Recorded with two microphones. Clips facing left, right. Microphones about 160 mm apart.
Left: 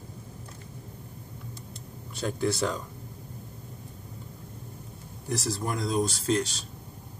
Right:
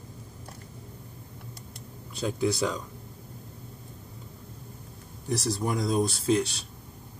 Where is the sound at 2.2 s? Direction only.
Centre (ahead or behind).